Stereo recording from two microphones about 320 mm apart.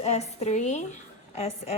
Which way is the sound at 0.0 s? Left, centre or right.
Left.